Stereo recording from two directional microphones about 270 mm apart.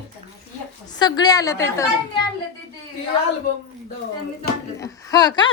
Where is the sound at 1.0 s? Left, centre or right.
Centre.